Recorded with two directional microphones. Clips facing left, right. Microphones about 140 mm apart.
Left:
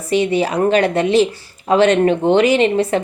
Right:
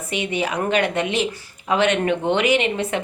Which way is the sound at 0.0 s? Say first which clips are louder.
Left 8 dB; 35° left (ahead or behind).